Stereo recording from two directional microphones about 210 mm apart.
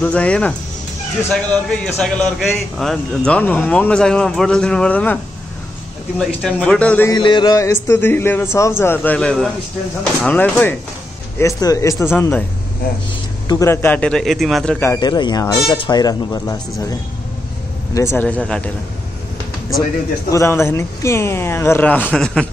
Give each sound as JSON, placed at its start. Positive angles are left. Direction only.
{"t": 0.0, "sound": "a man's voice", "side_deg": 5}
{"t": 7.2, "sound": "a man's voice", "side_deg": 20}
{"t": 13.5, "sound": "a man's voice", "side_deg": 15}
{"t": 17.9, "sound": "a man's voice", "side_deg": 10}
{"t": 20.2, "sound": "a man's voice", "side_deg": 15}